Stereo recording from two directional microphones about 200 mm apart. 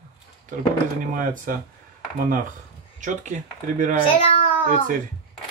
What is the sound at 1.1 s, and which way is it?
Speech, 45° right (ahead or behind).